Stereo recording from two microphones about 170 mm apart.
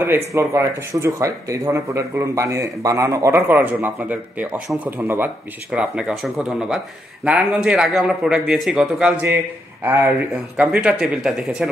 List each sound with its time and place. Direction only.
0.0 s a man's voice: 15° right (ahead or behind)